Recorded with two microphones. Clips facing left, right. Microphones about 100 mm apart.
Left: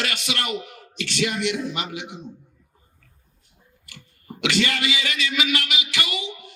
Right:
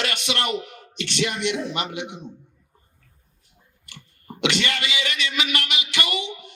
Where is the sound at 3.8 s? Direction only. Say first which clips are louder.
Even; 25° right (ahead or behind).